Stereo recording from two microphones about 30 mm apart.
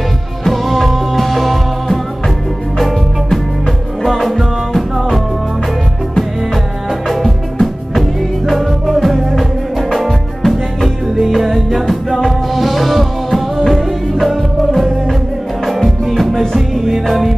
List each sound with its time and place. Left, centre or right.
0.5 s music: centre
4.0 s music: centre
7.1 s music: centre
12.1 s music: centre
12.5 s music: centre